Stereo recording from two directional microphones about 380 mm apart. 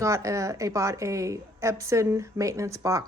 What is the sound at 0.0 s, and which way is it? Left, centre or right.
A woman's voice, centre.